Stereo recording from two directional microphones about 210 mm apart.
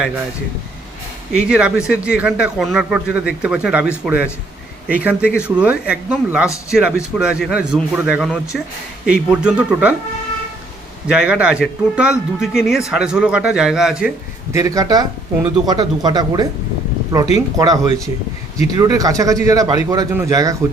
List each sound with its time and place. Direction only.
1.3 s a man's voice: 5° right (ahead or behind)
11.1 s a man's voice: 5° right (ahead or behind)
14.5 s a man's voice: 15° right (ahead or behind)